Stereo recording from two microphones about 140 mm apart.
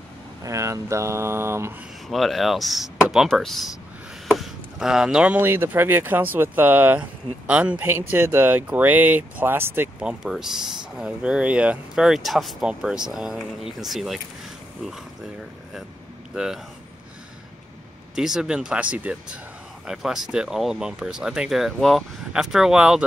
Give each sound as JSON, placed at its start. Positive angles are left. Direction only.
{"t": 0.4, "sound": "speech", "side_deg": -20}
{"t": 2.0, "sound": "speech", "side_deg": 0}
{"t": 18.1, "sound": "speech", "side_deg": -5}